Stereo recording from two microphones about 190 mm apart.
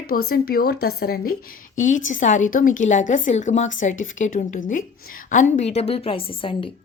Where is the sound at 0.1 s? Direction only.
50° left (ahead or behind); by 6.7 s 30° left (ahead or behind).